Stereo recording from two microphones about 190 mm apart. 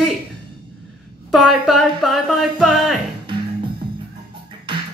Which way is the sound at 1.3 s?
Centre (ahead or behind).